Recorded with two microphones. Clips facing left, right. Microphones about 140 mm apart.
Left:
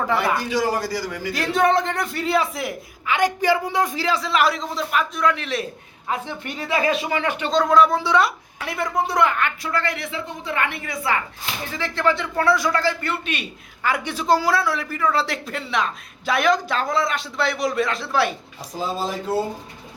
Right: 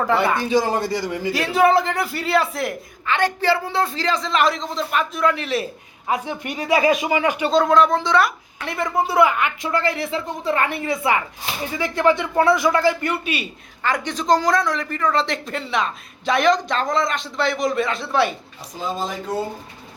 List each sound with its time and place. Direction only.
0.0 s speech: centre (ahead or behind)
0.5 s a woman's voice: 25° right (ahead or behind)
1.3 s speech: 5° right (ahead or behind)
3.2 s speech: 15° left (ahead or behind); by 5.6 s centre (ahead or behind)
6.1 s speech: 15° right (ahead or behind)
9.6 s a woman's voice: 25° right (ahead or behind)
11.8 s speech: 15° right (ahead or behind)
13.8 s speech: 10° left (ahead or behind)